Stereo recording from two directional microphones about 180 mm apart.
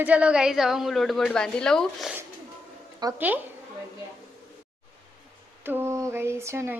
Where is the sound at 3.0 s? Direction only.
25° right (ahead or behind).